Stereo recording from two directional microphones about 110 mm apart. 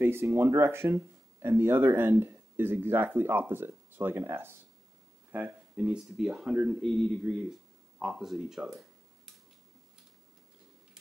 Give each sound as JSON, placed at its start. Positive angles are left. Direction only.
{"t": 0.0, "sound": "speech", "side_deg": -20}
{"t": 5.9, "sound": "speech", "side_deg": 0}
{"t": 6.8, "sound": "speech", "side_deg": 5}